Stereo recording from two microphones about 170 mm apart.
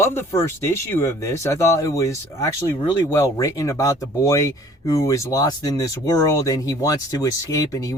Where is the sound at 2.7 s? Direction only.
30° left (ahead or behind).